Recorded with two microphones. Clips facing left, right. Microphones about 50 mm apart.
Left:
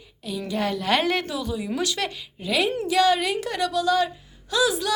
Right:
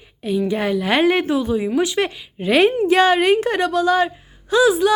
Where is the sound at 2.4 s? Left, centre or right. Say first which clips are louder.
Right 9 dB; right.